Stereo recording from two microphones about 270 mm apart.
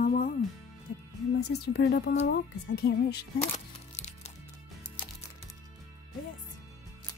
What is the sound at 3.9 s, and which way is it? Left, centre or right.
Music, left.